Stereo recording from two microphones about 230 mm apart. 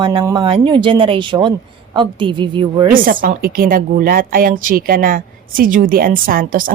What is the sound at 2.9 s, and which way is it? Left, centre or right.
A woman's voice, right.